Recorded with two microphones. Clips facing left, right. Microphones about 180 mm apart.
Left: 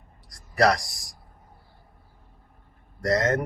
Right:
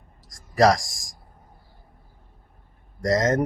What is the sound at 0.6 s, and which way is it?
Speech, 45° right (ahead or behind).